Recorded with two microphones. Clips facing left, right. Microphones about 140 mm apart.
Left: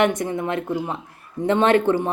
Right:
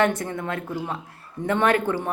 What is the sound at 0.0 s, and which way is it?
Speech, 20° left (ahead or behind).